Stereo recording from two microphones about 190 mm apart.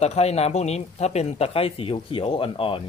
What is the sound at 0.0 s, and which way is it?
Speech, 35° left (ahead or behind).